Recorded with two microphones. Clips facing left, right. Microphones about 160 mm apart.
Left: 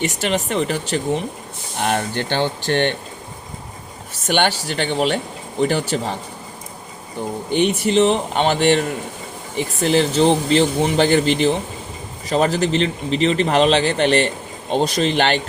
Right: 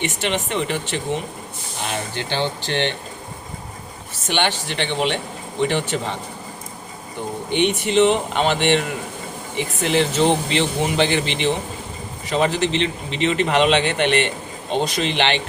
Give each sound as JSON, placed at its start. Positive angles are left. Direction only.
{"t": 0.0, "sound": "speech", "side_deg": 40}
{"t": 1.8, "sound": "speech", "side_deg": 55}
{"t": 4.3, "sound": "speech", "side_deg": 45}
{"t": 7.5, "sound": "speech", "side_deg": 40}